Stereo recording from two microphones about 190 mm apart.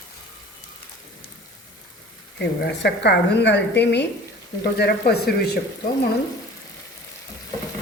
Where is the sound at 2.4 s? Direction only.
65° left (ahead or behind).